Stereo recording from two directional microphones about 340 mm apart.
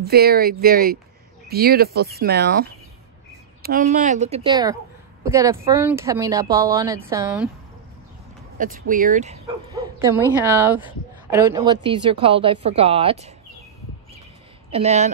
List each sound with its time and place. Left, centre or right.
0.0 s speech: right; by 7.4 s centre
8.5 s speech: right
9.9 s speech: centre
14.7 s speech: centre